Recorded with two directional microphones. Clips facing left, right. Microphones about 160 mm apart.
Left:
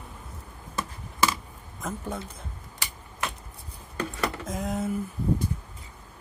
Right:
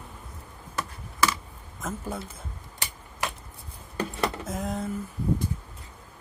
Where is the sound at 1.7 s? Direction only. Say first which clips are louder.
Even; centre (ahead or behind).